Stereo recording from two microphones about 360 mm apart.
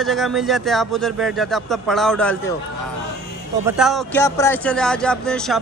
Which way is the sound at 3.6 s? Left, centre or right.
Centre.